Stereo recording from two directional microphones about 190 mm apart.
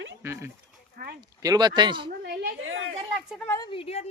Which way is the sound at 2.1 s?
60° right (ahead or behind).